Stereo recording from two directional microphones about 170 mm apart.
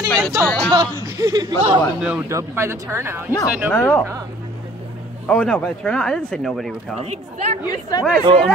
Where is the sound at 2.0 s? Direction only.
10° right (ahead or behind).